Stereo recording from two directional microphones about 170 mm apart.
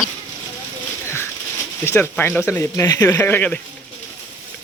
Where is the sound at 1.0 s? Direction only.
15° left (ahead or behind).